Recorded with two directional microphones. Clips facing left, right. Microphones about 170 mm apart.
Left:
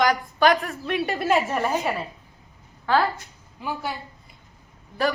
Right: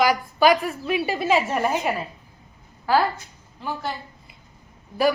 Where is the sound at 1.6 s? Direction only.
15° right (ahead or behind).